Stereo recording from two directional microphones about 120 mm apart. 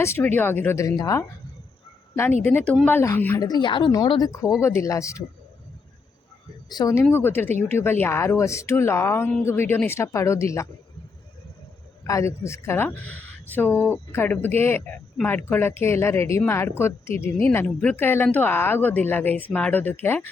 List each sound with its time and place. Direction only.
0.0 s a woman's voice: 20° left (ahead or behind)
2.4 s a woman's voice: 15° left (ahead or behind)
3.3 s speech: 35° left (ahead or behind)
4.1 s a woman's voice: 30° left (ahead or behind)
6.7 s speech: 35° left (ahead or behind)
7.1 s a woman's voice: 15° left (ahead or behind)
12.0 s a woman's voice: 25° left (ahead or behind)